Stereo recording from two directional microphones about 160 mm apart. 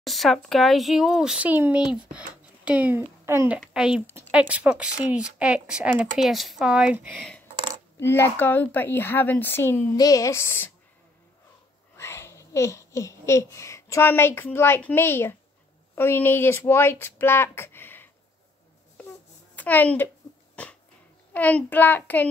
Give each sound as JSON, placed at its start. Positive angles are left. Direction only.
{"t": 0.0, "sound": "a child's voice", "side_deg": 0}
{"t": 8.0, "sound": "speech", "side_deg": 15}
{"t": 12.0, "sound": "speech", "side_deg": 15}
{"t": 19.5, "sound": "a child's voice", "side_deg": 10}
{"t": 21.3, "sound": "speech", "side_deg": 10}